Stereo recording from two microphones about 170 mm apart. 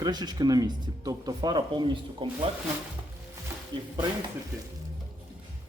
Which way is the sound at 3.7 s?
25° right (ahead or behind).